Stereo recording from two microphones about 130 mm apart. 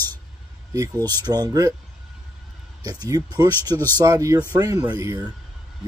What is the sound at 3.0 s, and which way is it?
Speech, 30° right (ahead or behind).